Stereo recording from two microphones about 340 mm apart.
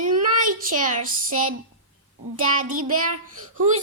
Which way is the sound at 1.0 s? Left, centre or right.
Right.